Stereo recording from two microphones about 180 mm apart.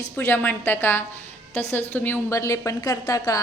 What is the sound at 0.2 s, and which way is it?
Speech, 10° left (ahead or behind).